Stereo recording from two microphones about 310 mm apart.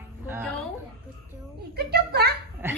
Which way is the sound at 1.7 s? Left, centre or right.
Right.